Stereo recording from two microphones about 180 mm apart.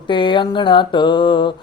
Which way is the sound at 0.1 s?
25° left (ahead or behind).